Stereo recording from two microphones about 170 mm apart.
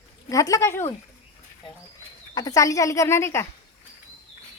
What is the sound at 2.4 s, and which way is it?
Speech, 20° left (ahead or behind).